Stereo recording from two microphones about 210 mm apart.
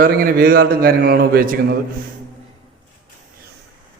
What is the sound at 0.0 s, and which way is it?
A man's voice, 40° right (ahead or behind).